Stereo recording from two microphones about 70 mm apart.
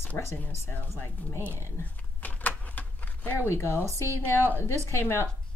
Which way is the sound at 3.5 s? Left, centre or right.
Left.